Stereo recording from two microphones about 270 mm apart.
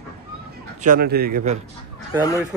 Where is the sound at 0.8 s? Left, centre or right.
Right.